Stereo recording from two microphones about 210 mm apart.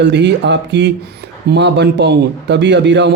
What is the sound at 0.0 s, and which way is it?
A man's voice, 55° right (ahead or behind).